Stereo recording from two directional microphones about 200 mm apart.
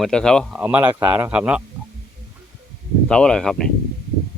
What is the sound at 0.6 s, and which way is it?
Speech, 10° right (ahead or behind).